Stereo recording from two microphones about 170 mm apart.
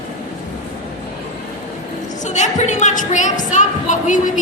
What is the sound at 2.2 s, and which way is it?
A woman's voice, 45° left (ahead or behind).